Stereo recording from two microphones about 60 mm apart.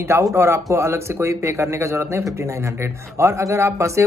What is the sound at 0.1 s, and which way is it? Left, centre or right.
Speech, right.